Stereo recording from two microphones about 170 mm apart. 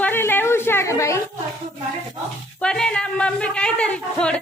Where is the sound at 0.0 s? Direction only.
10° left (ahead or behind).